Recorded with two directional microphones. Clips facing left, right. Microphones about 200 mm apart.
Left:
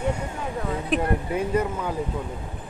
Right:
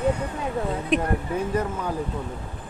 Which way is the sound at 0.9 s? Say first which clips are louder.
Left 1 dB; 10° left (ahead or behind).